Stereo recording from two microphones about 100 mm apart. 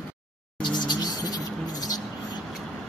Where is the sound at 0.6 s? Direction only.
45° left (ahead or behind).